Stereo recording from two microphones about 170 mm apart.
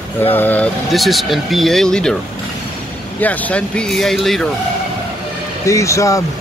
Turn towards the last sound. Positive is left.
turn(degrees=20)  # may be behind; listen again after turning